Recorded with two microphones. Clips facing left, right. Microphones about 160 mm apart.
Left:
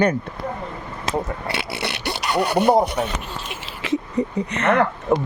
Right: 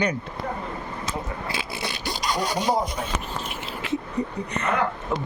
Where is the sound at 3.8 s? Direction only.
90° left.